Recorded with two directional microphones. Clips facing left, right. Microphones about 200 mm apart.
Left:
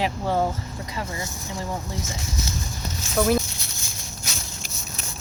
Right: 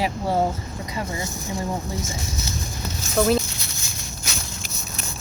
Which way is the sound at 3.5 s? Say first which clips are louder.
Right 3 dB; 85° right.